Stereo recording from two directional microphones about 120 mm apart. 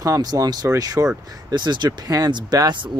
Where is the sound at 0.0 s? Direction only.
30° right (ahead or behind).